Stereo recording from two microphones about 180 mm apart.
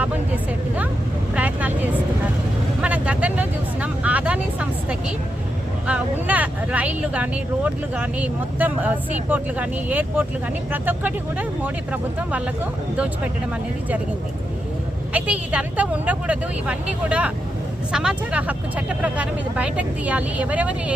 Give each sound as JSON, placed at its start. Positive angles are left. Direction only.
{"t": 1.4, "sound": "vehicle", "side_deg": -10}
{"t": 5.8, "sound": "speech", "side_deg": -10}
{"t": 15.1, "sound": "speech", "side_deg": -10}